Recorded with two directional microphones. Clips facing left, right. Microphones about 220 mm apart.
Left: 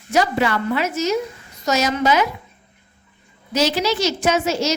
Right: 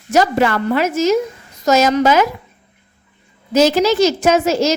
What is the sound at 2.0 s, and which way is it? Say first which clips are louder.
Speech: right 4 dB; 45° right (ahead or behind).